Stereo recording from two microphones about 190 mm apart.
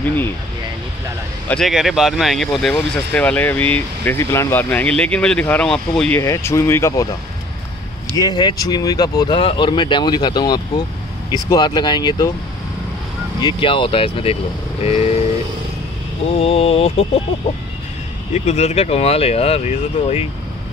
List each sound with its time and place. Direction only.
1.5 s speech: centre (ahead or behind)
8.2 s speech: 20° left (ahead or behind)
13.4 s speech: 25° left (ahead or behind)
16.3 s speech: 30° left (ahead or behind)
18.3 s speech: 35° left (ahead or behind)